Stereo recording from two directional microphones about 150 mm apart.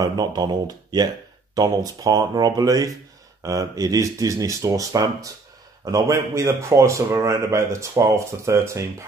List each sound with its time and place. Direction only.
0.0 s a man's voice: 25° right (ahead or behind)